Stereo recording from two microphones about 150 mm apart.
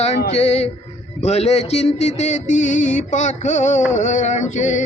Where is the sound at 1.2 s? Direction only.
45° left (ahead or behind).